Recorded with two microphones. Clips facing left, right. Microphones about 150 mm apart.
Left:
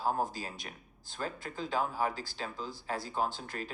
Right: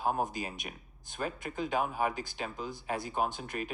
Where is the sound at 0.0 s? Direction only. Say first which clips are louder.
Right 1 dB; 20° right (ahead or behind).